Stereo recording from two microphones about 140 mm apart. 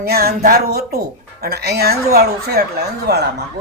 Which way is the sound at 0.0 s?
90° right.